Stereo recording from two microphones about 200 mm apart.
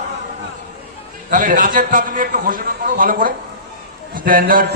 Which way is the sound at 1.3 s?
40° right (ahead or behind).